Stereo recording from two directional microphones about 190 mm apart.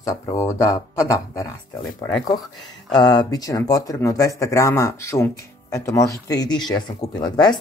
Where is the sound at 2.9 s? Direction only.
20° left (ahead or behind).